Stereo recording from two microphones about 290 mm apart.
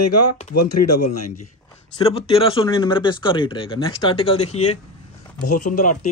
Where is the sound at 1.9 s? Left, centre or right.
Centre.